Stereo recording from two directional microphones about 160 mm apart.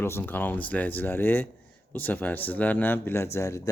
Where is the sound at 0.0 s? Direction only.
15° left (ahead or behind).